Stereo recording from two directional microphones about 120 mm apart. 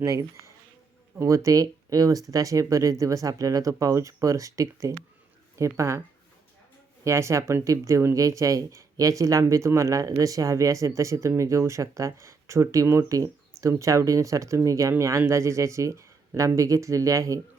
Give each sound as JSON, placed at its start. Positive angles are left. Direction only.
{"t": 0.0, "sound": "speech", "side_deg": -25}
{"t": 7.0, "sound": "speech", "side_deg": -25}